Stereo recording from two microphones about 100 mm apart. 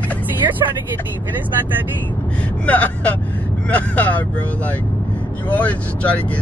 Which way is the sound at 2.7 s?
15° left (ahead or behind).